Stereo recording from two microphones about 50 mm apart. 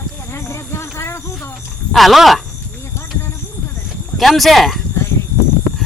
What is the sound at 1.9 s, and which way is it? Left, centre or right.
Speech, centre.